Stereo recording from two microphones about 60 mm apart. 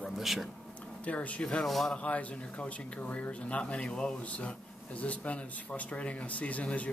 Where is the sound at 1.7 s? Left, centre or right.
Centre.